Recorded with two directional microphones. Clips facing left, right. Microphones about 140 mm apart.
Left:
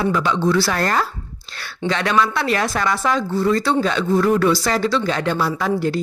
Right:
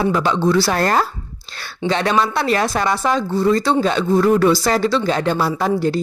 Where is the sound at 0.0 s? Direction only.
30° right (ahead or behind).